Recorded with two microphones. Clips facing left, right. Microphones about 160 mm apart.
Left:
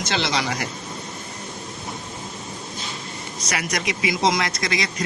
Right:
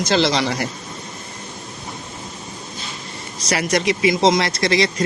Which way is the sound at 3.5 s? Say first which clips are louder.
Right 7 dB; 30° right (ahead or behind).